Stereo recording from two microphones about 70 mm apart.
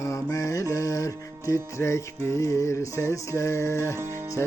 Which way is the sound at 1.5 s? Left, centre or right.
Left.